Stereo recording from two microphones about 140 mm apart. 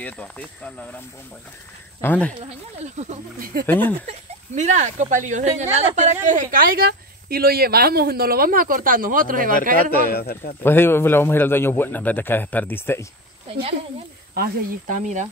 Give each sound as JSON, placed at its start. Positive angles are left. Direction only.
{"t": 0.0, "sound": "a man's voice", "side_deg": 10}
{"t": 2.0, "sound": "a man's voice", "side_deg": 10}
{"t": 2.8, "sound": "speech", "side_deg": -55}
{"t": 3.3, "sound": "speech", "side_deg": -90}
{"t": 3.6, "sound": "a man's voice", "side_deg": 15}
{"t": 4.1, "sound": "speech", "side_deg": -55}
{"t": 9.8, "sound": "speech", "side_deg": 90}
{"t": 10.6, "sound": "a man's voice", "side_deg": 15}
{"t": 13.5, "sound": "speech", "side_deg": -45}
{"t": 14.3, "sound": "speech", "side_deg": -75}